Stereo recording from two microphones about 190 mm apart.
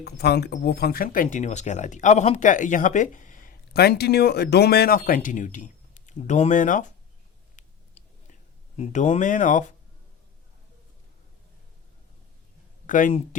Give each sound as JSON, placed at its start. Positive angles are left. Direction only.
{"t": 0.0, "sound": "speech", "side_deg": 60}
{"t": 7.5, "sound": "a sound", "side_deg": 40}
{"t": 12.9, "sound": "speech", "side_deg": 45}